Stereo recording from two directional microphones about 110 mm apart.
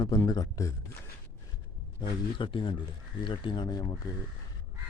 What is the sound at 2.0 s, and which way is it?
Speech, 50° left (ahead or behind).